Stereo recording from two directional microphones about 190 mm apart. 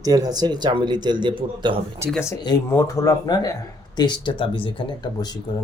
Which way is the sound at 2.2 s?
20° left (ahead or behind).